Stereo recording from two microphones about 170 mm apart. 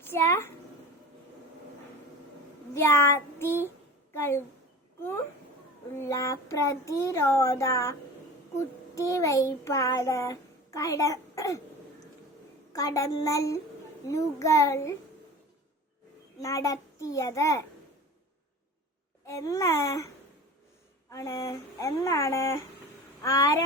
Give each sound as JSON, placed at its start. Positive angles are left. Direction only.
{"t": 0.0, "sound": "a child's voice", "side_deg": 15}
{"t": 2.7, "sound": "a child's voice", "side_deg": 15}
{"t": 6.0, "sound": "a child's voice", "side_deg": 15}
{"t": 12.7, "sound": "a child's voice", "side_deg": 20}
{"t": 16.4, "sound": "a child's voice", "side_deg": 20}
{"t": 19.2, "sound": "a child's voice", "side_deg": 20}
{"t": 21.1, "sound": "a child's voice", "side_deg": 20}